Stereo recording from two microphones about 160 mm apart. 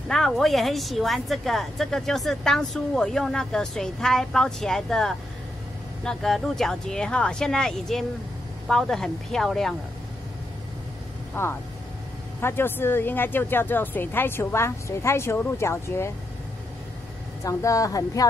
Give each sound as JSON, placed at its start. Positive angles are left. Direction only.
{"t": 0.1, "sound": "a woman's voice", "side_deg": 0}
{"t": 11.4, "sound": "speech", "side_deg": 10}
{"t": 17.4, "sound": "a woman's voice", "side_deg": 20}